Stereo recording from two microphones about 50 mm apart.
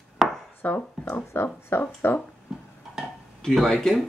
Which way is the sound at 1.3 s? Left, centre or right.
Left.